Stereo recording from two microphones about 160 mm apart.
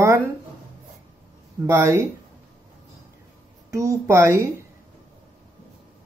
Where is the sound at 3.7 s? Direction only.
20° right (ahead or behind).